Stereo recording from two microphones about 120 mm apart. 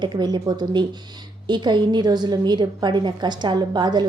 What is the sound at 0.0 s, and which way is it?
A woman's voice, 35° right (ahead or behind).